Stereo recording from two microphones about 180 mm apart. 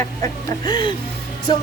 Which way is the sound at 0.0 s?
20° left (ahead or behind).